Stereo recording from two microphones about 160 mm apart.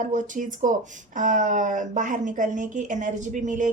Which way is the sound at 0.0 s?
50° right (ahead or behind).